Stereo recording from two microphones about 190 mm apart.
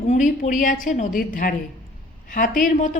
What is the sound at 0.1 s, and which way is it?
A woman's voice, 40° left (ahead or behind).